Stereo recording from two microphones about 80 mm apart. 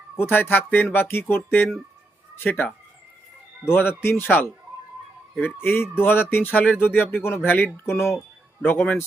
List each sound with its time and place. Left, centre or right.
0.3 s speech: left
3.7 s speech: left
5.5 s speech: left